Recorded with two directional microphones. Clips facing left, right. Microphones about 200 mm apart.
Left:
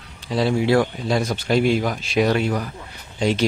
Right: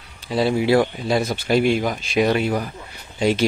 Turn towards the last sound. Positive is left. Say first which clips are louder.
# right 2 dB
turn(degrees=-5)  # may be behind; listen again after turning